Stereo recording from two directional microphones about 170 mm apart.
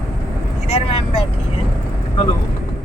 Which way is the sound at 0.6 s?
40° left (ahead or behind).